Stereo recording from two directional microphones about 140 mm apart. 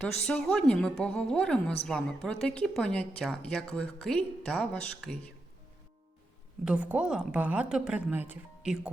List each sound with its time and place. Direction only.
0.3 s a woman's voice: 5° left (ahead or behind)
6.7 s a woman's voice: 10° right (ahead or behind)